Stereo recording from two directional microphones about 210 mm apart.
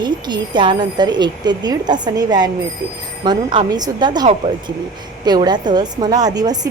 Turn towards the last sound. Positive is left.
turn(degrees=-20)  # may be behind; listen again after turning